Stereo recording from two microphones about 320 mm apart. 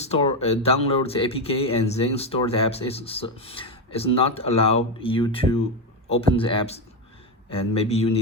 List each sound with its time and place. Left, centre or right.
0.0 s speech: centre